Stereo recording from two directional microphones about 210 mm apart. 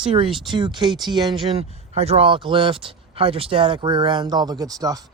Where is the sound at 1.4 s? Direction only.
30° right (ahead or behind).